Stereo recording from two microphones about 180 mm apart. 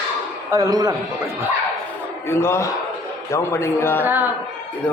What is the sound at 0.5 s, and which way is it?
Speech, 20° right (ahead or behind).